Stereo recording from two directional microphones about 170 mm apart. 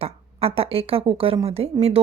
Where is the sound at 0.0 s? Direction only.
35° right (ahead or behind).